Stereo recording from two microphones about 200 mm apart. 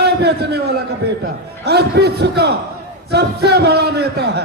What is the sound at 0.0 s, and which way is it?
A man's voice, 55° right (ahead or behind).